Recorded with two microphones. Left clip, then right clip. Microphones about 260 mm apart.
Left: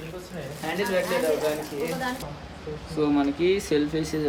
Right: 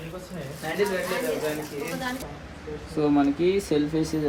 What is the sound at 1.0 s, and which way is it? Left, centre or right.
Speech, left.